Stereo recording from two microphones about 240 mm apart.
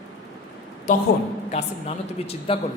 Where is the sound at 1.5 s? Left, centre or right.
Left.